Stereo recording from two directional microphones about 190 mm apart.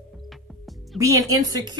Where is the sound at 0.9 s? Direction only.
15° right (ahead or behind).